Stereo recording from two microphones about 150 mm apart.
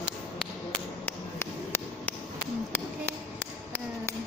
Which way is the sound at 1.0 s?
15° left (ahead or behind).